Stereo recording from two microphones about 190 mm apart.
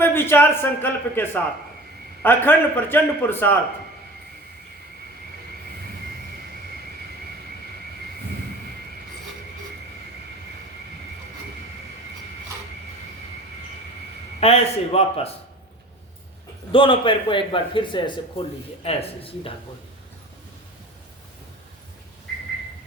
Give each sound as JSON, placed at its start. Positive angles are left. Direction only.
{"t": 0.0, "sound": "a man's voice", "side_deg": 10}
{"t": 14.4, "sound": "a man's voice", "side_deg": 35}
{"t": 16.7, "sound": "a man's voice", "side_deg": 25}